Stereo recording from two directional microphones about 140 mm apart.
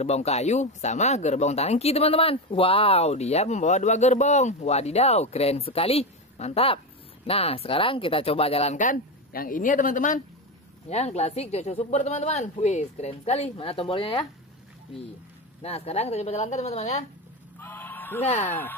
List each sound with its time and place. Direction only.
0.0 s speech: 50° left (ahead or behind)
8.7 s a woman's voice: 80° left
10.9 s speech: 50° left (ahead or behind)
15.6 s speech: 45° left (ahead or behind)
17.6 s a sound: 15° left (ahead or behind)
18.2 s speech: 50° left (ahead or behind)
18.5 s speech: 15° left (ahead or behind)